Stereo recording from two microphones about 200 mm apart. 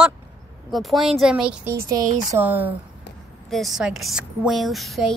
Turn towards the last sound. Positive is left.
turn(degrees=0)  # may be behind; listen again after turning